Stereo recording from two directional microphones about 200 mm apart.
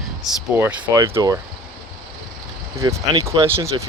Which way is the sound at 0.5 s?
10° right (ahead or behind).